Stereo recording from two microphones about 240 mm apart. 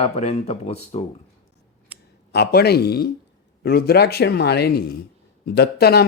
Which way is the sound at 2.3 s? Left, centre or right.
Left.